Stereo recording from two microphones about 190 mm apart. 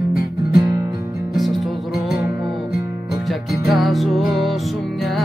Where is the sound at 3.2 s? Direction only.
Centre (ahead or behind).